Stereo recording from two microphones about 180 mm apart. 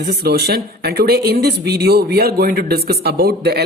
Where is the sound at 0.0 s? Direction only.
60° right (ahead or behind).